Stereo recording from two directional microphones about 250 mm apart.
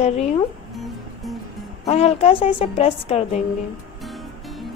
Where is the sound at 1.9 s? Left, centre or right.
Left.